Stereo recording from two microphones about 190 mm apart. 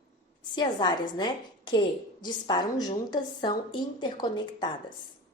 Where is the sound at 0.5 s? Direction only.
25° left (ahead or behind).